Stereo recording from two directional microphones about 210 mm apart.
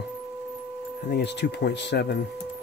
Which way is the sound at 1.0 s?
50° left (ahead or behind).